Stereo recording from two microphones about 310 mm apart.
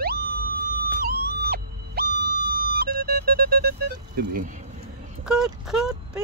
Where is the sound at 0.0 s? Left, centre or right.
Right.